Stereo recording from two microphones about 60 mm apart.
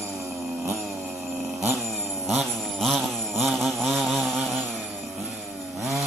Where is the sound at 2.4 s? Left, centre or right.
Centre.